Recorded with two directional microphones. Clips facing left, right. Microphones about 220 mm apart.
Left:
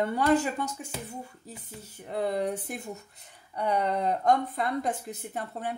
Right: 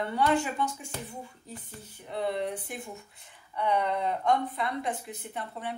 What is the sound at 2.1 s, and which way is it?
Speech, 40° left (ahead or behind).